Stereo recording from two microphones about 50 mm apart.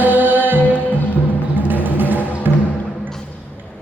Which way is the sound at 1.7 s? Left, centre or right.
Right.